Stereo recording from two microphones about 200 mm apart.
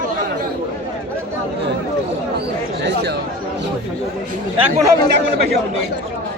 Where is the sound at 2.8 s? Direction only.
55° right (ahead or behind).